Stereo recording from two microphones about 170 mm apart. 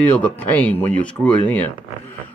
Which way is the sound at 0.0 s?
10° left (ahead or behind).